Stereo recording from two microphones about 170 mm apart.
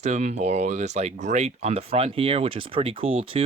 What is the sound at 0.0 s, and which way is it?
Speech, 40° right (ahead or behind).